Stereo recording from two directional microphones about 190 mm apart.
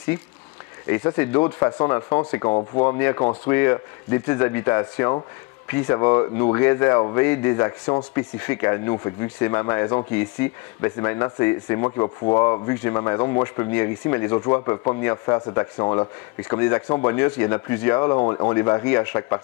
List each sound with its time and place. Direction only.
0.8 s speech: 15° left (ahead or behind)
3.0 s speech: 15° left (ahead or behind)